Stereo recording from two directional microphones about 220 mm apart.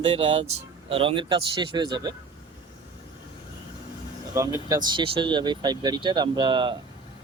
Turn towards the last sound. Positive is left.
turn(degrees=-20)  # may be behind; listen again after turning